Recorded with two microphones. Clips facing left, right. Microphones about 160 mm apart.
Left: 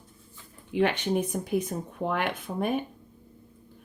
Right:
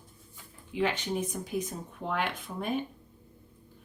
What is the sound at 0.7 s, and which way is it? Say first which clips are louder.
Speech: left 5 dB; 60° left (ahead or behind).